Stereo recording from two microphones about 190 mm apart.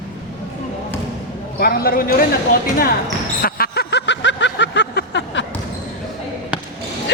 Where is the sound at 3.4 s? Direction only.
55° left (ahead or behind).